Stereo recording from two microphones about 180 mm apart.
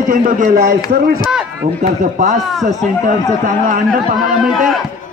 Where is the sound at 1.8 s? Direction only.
40° right (ahead or behind).